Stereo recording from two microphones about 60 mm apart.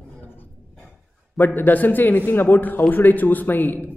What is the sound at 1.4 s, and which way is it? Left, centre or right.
Speech, left.